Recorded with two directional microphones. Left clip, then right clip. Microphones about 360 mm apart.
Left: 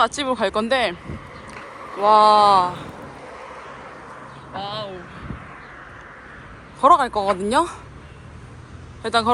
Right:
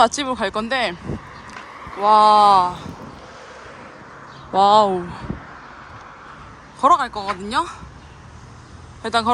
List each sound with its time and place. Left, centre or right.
0.0 s speech: centre
2.0 s speech: centre
4.5 s speech: centre
6.7 s speech: centre
9.0 s speech: centre